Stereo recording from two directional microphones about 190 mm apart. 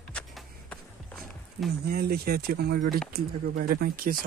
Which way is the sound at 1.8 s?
55° right (ahead or behind).